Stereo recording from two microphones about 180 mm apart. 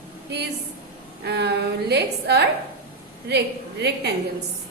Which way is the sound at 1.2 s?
70° right (ahead or behind).